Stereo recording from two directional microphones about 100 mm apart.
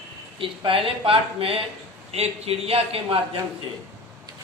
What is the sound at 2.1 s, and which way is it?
A man's voice, 90° right.